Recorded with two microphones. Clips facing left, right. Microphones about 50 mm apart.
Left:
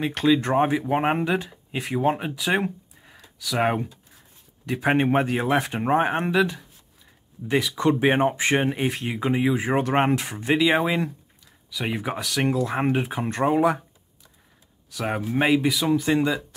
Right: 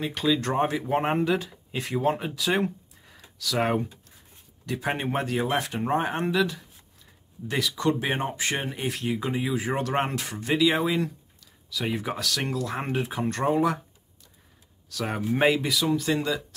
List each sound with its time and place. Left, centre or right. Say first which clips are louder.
0.3 s speech: left 4 dB; centre
10.7 s speech: left 3 dB; left
11.7 s speech: left 1 dB; centre
14.9 s speech: left 3 dB; centre
15.2 s speech: left 2 dB; centre
15.8 s speech: left 4 dB; centre